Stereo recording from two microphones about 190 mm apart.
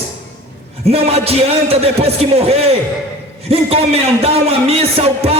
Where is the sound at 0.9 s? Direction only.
30° right (ahead or behind).